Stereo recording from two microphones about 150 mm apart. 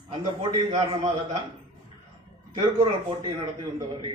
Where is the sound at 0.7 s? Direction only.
35° right (ahead or behind).